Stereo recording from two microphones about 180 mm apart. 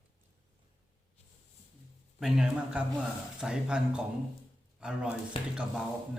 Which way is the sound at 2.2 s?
5° right (ahead or behind).